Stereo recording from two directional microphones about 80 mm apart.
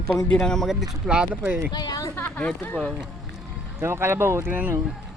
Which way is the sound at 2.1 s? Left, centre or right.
Centre.